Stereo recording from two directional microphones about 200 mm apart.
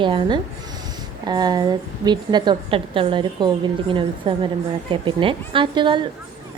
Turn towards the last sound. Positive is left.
turn(degrees=-25)  # may be behind; listen again after turning